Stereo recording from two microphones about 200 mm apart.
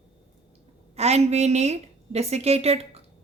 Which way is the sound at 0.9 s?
30° right (ahead or behind).